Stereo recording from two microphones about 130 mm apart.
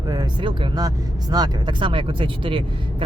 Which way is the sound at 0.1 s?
35° right (ahead or behind).